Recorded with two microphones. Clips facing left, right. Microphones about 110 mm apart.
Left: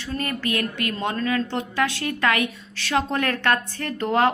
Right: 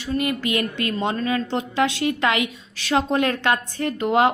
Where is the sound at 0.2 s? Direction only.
20° right (ahead or behind).